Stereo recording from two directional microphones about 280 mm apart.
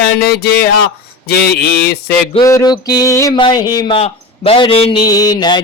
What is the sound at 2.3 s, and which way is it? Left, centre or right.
Speech, centre.